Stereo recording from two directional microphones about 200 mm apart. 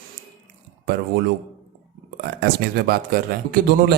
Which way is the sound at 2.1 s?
50° right (ahead or behind).